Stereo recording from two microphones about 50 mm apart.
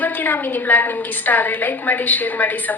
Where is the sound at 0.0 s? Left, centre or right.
Left.